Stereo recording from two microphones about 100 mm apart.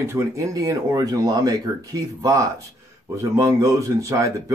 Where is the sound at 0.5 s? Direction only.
40° right (ahead or behind).